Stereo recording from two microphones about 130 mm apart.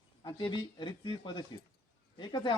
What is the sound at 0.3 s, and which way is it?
Speech, 35° left (ahead or behind).